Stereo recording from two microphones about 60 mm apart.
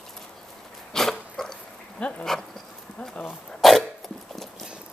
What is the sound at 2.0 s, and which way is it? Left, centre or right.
Speech, left.